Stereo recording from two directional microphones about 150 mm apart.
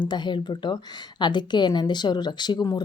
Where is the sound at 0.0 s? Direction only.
30° left (ahead or behind).